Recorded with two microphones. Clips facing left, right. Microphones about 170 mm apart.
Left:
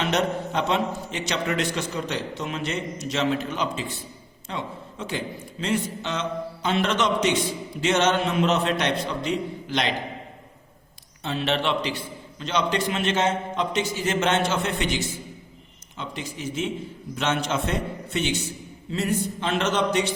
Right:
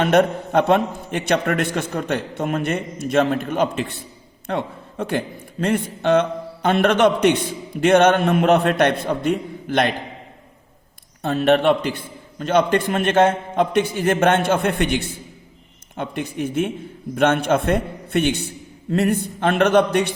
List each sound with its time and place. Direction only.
0.0 s a man's voice: 55° right (ahead or behind)
11.2 s a man's voice: 50° right (ahead or behind)